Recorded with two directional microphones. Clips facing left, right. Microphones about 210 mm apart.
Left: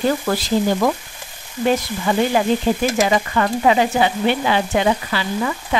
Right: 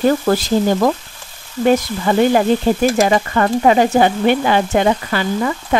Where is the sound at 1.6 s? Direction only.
50° right (ahead or behind).